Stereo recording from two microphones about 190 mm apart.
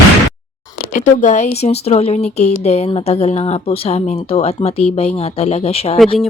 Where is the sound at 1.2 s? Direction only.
40° left (ahead or behind).